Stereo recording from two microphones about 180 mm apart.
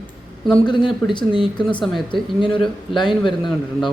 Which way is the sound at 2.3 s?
Centre (ahead or behind).